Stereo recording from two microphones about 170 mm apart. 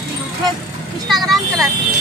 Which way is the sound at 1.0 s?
Centre (ahead or behind).